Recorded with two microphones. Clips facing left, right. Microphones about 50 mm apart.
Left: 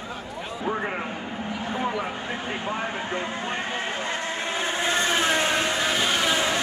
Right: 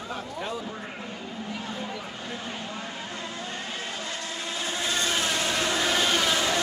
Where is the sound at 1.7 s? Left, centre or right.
Left.